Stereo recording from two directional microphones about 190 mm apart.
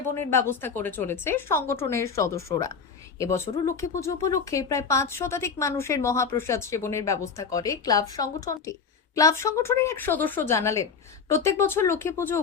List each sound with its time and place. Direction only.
0.3 s speech: 10° left (ahead or behind)